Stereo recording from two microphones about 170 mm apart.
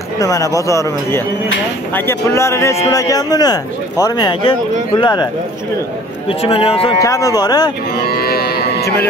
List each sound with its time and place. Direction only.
0.2 s a man's voice: 20° left (ahead or behind)
7.0 s a man's voice: 20° left (ahead or behind)
8.1 s cattle: 65° left (ahead or behind)